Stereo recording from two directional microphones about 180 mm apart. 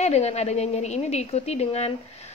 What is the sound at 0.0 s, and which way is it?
A woman's voice, 35° left (ahead or behind).